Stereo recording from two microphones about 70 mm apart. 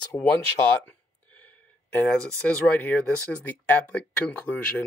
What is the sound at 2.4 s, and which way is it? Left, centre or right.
Speech, centre.